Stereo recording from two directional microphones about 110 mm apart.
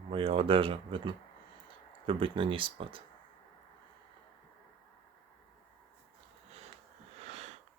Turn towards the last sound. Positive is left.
turn(degrees=-80)